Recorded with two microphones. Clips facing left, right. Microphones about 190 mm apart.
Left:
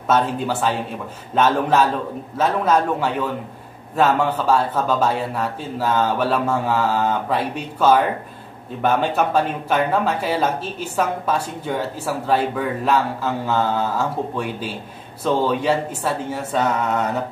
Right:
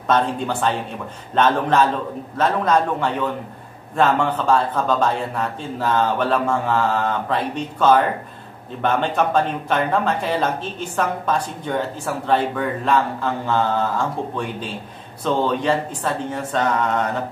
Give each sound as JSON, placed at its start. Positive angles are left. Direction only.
{"t": 0.1, "sound": "speech", "side_deg": 5}